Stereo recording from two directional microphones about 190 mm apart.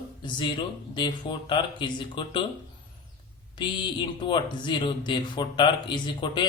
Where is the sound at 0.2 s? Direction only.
25° left (ahead or behind).